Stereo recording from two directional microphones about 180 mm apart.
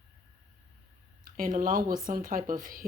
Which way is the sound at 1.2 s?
50° right (ahead or behind).